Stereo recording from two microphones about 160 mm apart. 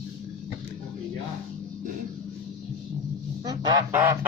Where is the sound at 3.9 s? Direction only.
15° right (ahead or behind).